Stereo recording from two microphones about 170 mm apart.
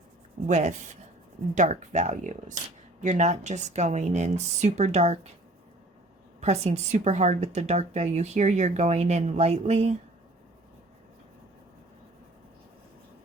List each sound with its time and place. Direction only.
0.4 s a woman's voice: 45° right (ahead or behind)
6.4 s a woman's voice: 40° right (ahead or behind)